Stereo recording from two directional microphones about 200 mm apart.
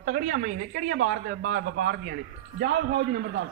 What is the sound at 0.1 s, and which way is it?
A woman's voice, 40° right (ahead or behind).